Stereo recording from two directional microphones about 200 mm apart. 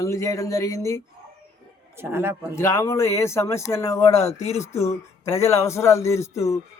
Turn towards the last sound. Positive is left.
turn(degrees=15)  # may be behind; listen again after turning